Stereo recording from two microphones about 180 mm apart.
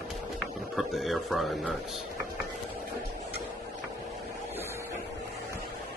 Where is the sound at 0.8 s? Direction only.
Centre (ahead or behind).